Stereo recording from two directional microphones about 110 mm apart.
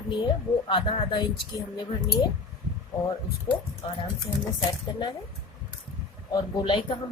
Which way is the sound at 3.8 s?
45° left (ahead or behind).